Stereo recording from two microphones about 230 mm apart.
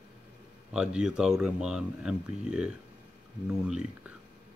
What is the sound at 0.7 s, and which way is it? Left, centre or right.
Speech, centre.